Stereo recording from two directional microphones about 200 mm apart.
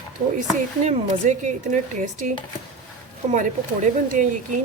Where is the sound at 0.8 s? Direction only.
35° right (ahead or behind).